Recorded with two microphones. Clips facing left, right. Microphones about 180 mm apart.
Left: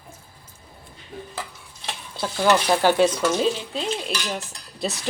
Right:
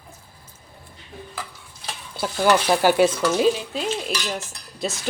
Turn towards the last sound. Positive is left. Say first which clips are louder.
# even
turn(degrees=0)  # may be behind; listen again after turning